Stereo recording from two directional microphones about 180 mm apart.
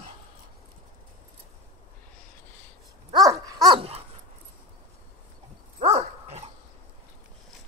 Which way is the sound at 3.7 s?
35° right (ahead or behind).